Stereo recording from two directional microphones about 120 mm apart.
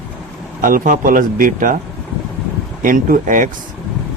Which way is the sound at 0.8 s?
90° right.